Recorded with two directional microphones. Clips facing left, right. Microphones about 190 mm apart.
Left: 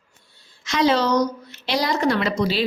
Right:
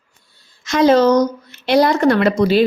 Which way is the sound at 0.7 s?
50° right (ahead or behind).